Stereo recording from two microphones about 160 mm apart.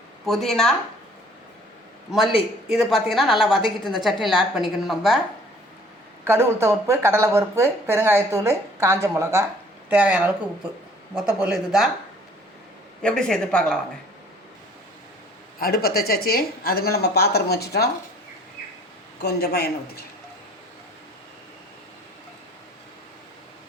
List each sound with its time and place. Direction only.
0.3 s a woman's voice: centre (ahead or behind)
2.1 s a woman's voice: centre (ahead or behind)
6.2 s a woman's voice: 15° right (ahead or behind)
13.0 s a woman's voice: 5° left (ahead or behind)
15.5 s a woman's voice: 70° left (ahead or behind); by 17.8 s 90° left
19.2 s a woman's voice: 80° left